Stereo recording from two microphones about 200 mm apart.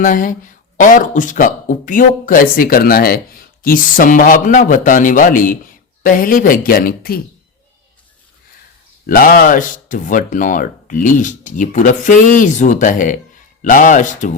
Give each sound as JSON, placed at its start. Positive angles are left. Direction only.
{"t": 0.0, "sound": "speech", "side_deg": 40}
{"t": 9.0, "sound": "speech", "side_deg": 45}